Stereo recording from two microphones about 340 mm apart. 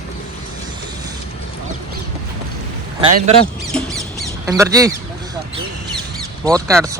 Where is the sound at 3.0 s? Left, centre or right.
Centre.